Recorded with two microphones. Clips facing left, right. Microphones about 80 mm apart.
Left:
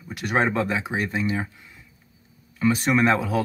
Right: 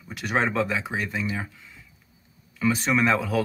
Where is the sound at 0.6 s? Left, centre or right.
Left.